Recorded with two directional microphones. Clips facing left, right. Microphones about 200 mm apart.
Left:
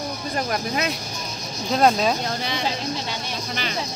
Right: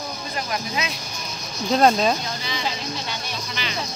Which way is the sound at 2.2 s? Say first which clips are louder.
Left 3 dB; 55° left (ahead or behind).